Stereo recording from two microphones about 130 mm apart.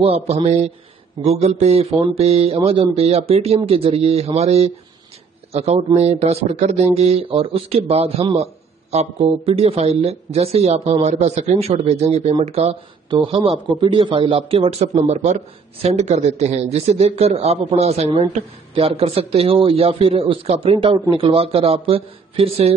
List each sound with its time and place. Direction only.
0.0 s speech: 55° right (ahead or behind)
13.1 s speech: 40° right (ahead or behind)
15.0 s speech: 65° right (ahead or behind); by 22.8 s 50° right (ahead or behind)